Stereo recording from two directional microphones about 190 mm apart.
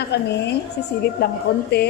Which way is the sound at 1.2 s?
55° left (ahead or behind).